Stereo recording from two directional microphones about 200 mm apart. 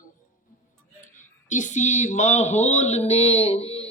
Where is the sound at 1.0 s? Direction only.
40° left (ahead or behind).